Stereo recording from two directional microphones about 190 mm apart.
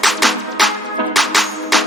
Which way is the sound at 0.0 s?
Centre (ahead or behind).